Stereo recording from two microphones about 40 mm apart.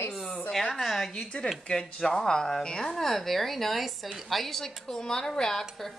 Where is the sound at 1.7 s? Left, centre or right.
Left.